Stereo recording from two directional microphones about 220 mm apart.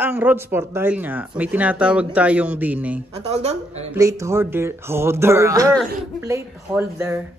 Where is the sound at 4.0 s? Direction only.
15° right (ahead or behind).